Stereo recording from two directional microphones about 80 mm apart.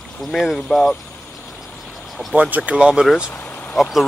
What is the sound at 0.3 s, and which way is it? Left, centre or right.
Speech, centre.